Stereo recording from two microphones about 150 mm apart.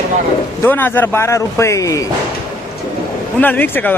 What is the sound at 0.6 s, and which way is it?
Speech, 15° left (ahead or behind).